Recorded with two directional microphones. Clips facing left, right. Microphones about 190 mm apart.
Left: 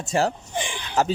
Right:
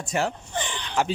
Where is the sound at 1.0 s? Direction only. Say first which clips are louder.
Left 3 dB; 40° left (ahead or behind).